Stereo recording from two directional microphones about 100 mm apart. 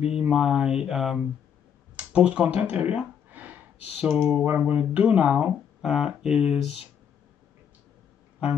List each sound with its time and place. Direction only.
0.0 s mantra: 10° right (ahead or behind)
2.0 s a sound: 10° right (ahead or behind)
4.1 s speech: 20° right (ahead or behind)
4.4 s speech: 10° right (ahead or behind)